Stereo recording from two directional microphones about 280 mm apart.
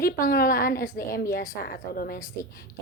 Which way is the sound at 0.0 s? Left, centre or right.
Left.